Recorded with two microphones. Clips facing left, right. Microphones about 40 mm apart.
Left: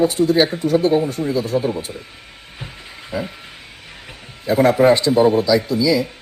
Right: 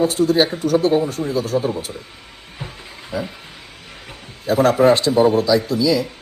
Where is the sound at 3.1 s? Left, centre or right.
Left.